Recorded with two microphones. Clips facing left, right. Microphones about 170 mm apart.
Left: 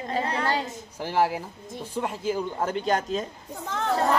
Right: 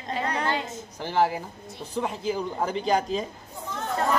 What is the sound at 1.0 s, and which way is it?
Speech, 5° left (ahead or behind).